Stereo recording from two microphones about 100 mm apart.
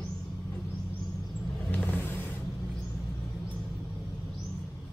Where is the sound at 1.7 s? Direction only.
15° left (ahead or behind).